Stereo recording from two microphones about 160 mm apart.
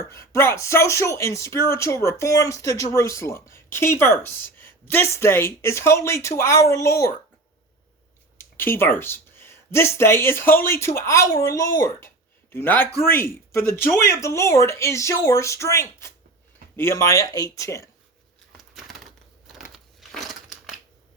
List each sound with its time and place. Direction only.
0.1 s speech: 15° left (ahead or behind)
8.4 s speech: 15° left (ahead or behind)
18.5 s bird: centre (ahead or behind)
19.5 s crumpling: centre (ahead or behind)